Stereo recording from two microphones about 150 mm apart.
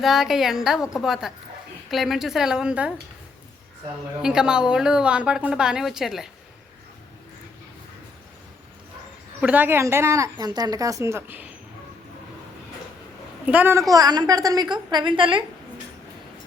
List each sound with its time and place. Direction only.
0.0 s a woman's voice: centre (ahead or behind)
4.2 s a woman's voice: 5° right (ahead or behind)
9.4 s a woman's voice: 10° right (ahead or behind)
13.4 s a woman's voice: 10° right (ahead or behind)
13.9 s a woman's voice: 25° right (ahead or behind)